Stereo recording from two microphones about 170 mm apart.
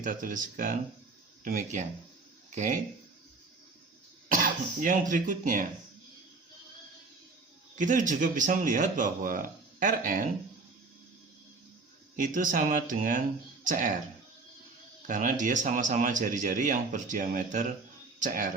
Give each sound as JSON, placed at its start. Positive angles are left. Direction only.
{"t": 0.0, "sound": "a man's voice", "side_deg": -50}
{"t": 4.8, "sound": "a man's voice", "side_deg": -50}
{"t": 7.8, "sound": "a man's voice", "side_deg": -50}
{"t": 12.1, "sound": "a man's voice", "side_deg": -50}
{"t": 15.0, "sound": "a man's voice", "side_deg": -50}